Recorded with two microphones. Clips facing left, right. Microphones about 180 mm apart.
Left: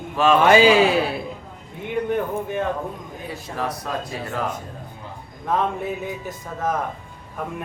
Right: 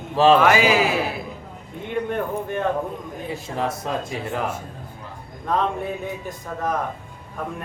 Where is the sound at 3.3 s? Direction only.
20° right (ahead or behind).